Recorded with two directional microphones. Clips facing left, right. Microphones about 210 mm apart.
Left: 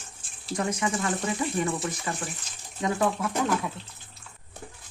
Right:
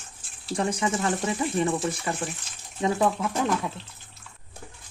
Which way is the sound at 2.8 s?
30° right (ahead or behind).